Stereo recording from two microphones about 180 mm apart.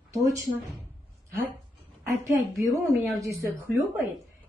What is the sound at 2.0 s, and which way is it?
A woman's voice, 15° right (ahead or behind).